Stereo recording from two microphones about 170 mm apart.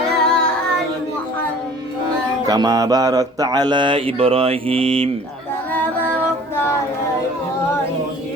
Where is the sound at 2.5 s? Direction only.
20° right (ahead or behind).